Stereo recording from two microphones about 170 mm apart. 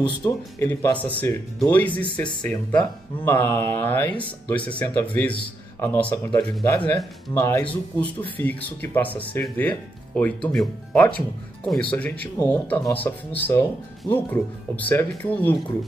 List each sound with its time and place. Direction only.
0.0 s speech: 20° left (ahead or behind)